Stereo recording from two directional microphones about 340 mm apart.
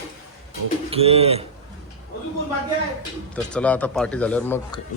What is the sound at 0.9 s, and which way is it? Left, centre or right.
Speech, centre.